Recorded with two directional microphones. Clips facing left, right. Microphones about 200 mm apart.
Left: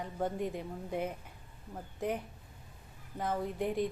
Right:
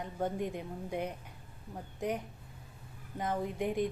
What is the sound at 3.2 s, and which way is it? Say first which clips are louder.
Speech: even; centre (ahead or behind).